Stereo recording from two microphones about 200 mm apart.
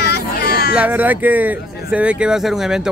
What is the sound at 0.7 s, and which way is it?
Speech, 10° right (ahead or behind).